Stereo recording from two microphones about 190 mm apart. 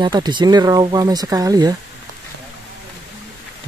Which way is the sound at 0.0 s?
25° right (ahead or behind).